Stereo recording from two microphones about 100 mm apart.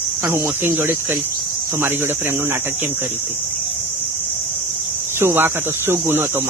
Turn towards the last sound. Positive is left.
turn(degrees=-20)  # may be behind; listen again after turning